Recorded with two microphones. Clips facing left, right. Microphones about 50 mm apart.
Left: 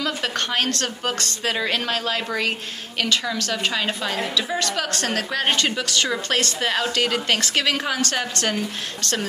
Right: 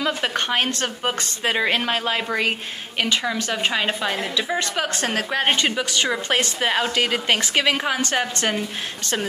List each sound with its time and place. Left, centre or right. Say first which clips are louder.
0.0 s a woman's voice: right 2 dB; centre